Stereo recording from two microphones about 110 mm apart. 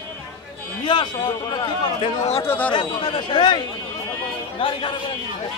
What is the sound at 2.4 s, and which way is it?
Speech, 15° left (ahead or behind).